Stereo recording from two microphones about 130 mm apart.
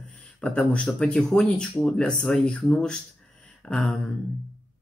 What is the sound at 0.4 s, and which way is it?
Speech, 10° left (ahead or behind).